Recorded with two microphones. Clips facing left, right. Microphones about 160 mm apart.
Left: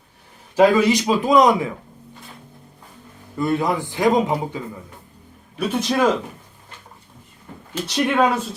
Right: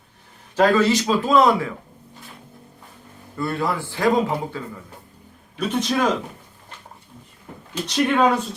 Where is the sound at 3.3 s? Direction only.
20° left (ahead or behind).